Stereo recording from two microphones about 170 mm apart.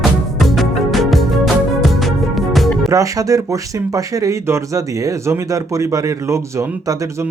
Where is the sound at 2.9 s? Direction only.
20° right (ahead or behind).